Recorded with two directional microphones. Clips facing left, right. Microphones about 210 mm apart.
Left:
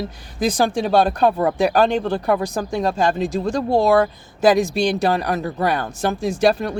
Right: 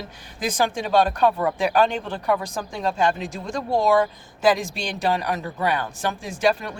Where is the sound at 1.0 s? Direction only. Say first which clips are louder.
Left 3 dB; 35° left (ahead or behind).